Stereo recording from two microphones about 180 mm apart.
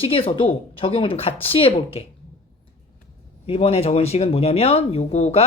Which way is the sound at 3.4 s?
35° left (ahead or behind).